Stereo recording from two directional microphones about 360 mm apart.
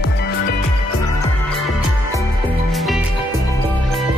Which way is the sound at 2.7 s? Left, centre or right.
Centre.